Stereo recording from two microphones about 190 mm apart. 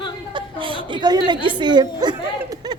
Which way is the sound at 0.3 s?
25° right (ahead or behind).